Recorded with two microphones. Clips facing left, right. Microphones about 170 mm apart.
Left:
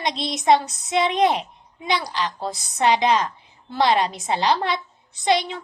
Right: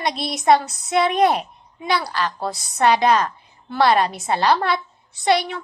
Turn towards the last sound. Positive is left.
turn(degrees=20)  # may be behind; listen again after turning